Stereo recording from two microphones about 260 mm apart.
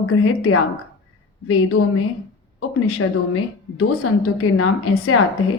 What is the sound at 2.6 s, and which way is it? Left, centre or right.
A woman's voice, left.